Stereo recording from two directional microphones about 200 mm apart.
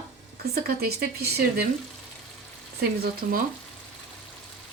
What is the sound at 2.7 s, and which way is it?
Speech, 45° right (ahead or behind).